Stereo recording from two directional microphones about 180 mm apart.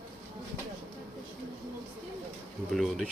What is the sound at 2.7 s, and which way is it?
Bee, centre (ahead or behind).